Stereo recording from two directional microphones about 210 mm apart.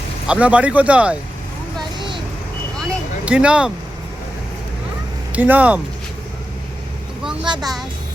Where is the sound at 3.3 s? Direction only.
5° right (ahead or behind).